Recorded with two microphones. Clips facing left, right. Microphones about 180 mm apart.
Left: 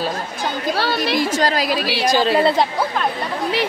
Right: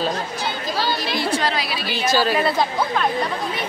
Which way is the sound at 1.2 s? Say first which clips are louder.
Left 3 dB; 40° left (ahead or behind).